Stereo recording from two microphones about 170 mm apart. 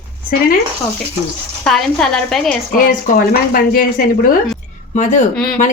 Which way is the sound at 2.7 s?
55° left (ahead or behind).